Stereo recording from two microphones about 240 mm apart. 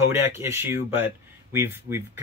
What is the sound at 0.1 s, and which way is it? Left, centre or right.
Speech, centre.